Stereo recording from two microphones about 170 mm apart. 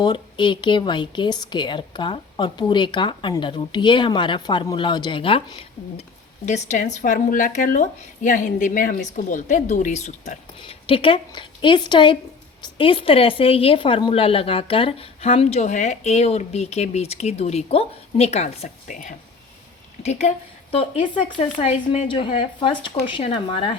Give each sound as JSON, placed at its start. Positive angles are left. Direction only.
{"t": 0.0, "sound": "a woman's voice", "side_deg": 25}
{"t": 10.6, "sound": "a woman's voice", "side_deg": 30}